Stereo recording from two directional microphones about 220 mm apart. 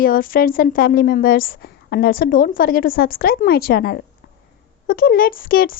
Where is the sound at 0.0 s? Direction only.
40° left (ahead or behind).